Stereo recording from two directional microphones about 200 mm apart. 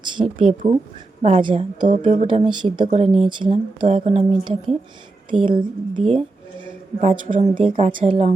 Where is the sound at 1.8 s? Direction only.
40° right (ahead or behind).